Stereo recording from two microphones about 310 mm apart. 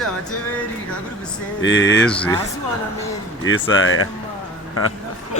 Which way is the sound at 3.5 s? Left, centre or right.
Left.